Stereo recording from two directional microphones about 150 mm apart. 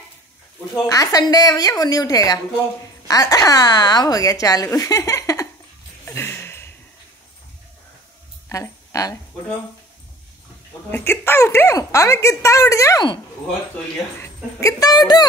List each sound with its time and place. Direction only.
0.7 s speech: 20° left (ahead or behind)
6.0 s a sound: 15° left (ahead or behind)
8.5 s speech: 20° left (ahead or behind)
10.9 s speech: 15° left (ahead or behind)
14.2 s speech: 20° left (ahead or behind)